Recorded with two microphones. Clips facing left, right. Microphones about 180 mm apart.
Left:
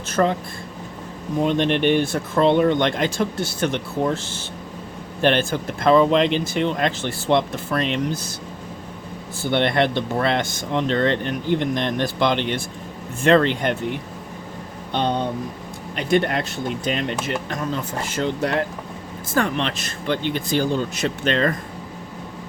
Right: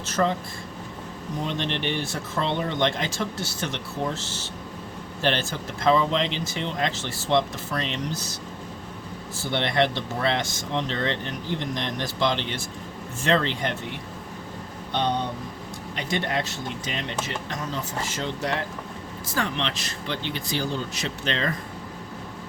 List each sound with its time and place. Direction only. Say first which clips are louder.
0.1 s speech: left 4 dB; 55° left (ahead or behind)
1.4 s speech: left 10 dB; 55° left (ahead or behind)
9.4 s speech: left 4 dB; 55° left (ahead or behind)
16.0 s speech: left 7 dB; 55° left (ahead or behind)